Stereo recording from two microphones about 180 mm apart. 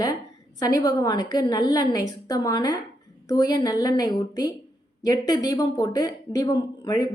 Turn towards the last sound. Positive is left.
turn(degrees=25)  # may be behind; listen again after turning